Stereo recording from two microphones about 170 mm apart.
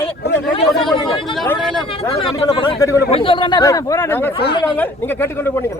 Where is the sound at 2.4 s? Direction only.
30° left (ahead or behind).